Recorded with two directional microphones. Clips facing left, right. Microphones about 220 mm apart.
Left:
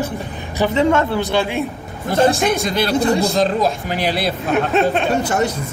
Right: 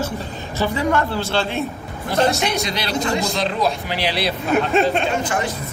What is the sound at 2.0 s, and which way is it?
Speech, 50° left (ahead or behind).